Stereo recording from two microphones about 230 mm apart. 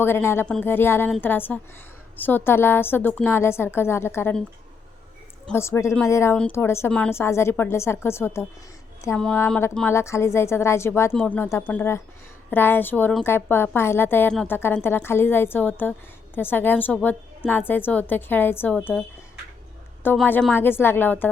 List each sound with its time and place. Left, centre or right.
0.0 s speech: centre
5.5 s speech: centre